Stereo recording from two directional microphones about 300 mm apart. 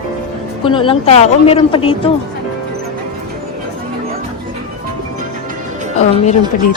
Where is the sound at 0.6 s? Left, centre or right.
Centre.